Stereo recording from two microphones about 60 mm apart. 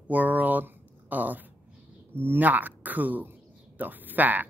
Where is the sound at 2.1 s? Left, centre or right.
Right.